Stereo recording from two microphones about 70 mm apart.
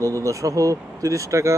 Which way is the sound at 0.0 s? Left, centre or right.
Right.